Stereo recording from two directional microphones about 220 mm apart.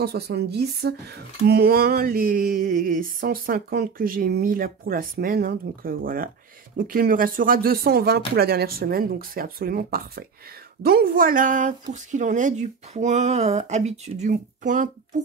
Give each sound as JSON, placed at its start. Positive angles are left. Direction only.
{"t": 0.0, "sound": "speech", "side_deg": -45}